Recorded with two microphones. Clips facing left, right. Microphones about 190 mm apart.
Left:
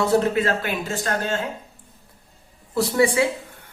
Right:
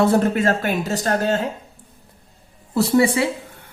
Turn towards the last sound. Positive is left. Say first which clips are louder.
# right 3 dB
turn(degrees=-65)  # may be behind; listen again after turning